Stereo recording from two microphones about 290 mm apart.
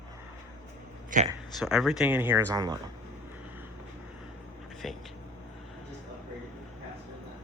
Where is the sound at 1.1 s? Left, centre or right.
Right.